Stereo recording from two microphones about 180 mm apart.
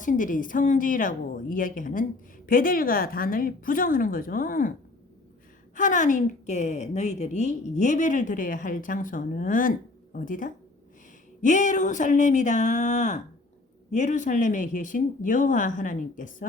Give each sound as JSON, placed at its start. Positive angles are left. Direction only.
{"t": 0.0, "sound": "a woman's voice", "side_deg": 45}
{"t": 5.7, "sound": "a woman's voice", "side_deg": 45}